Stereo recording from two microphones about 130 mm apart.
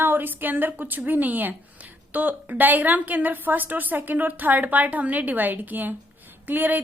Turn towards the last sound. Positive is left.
turn(degrees=-15)  # may be behind; listen again after turning